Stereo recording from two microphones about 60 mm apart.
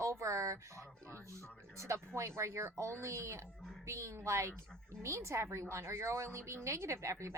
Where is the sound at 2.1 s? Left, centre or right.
Right.